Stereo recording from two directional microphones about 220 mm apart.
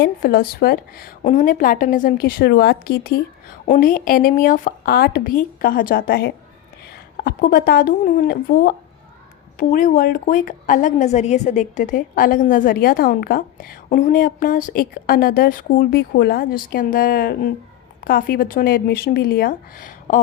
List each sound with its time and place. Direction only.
0.0 s a woman's voice: 40° left (ahead or behind)